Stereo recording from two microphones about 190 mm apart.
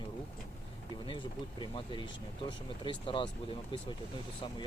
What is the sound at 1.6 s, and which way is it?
Speech, 25° left (ahead or behind).